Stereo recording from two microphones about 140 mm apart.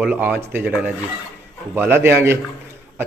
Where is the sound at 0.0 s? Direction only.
10° right (ahead or behind).